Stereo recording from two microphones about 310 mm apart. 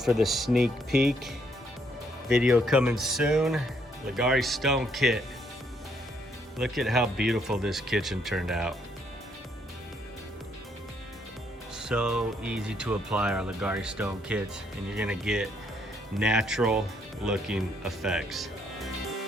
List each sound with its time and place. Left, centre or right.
0.0 s speech: centre
6.6 s speech: centre
11.8 s speech: centre